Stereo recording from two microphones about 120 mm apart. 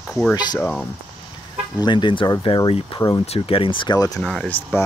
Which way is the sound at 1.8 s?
40° left (ahead or behind).